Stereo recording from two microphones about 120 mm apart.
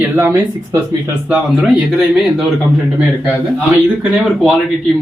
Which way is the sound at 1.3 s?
5° right (ahead or behind).